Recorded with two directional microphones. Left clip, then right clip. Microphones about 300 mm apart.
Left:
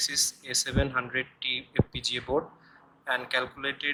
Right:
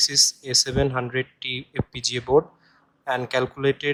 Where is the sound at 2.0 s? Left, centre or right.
Right.